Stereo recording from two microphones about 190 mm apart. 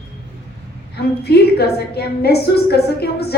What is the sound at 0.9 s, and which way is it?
A woman's voice, 60° left (ahead or behind).